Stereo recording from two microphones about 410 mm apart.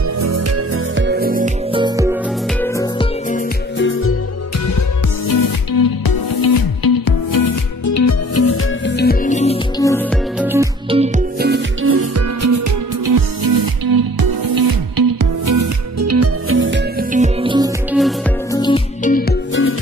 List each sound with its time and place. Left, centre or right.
0.2 s music: right; by 2.1 s centre
2.6 s music: centre
3.7 s music: left
5.3 s music: left; by 17.6 s centre
17.9 s music: centre
18.6 s music: centre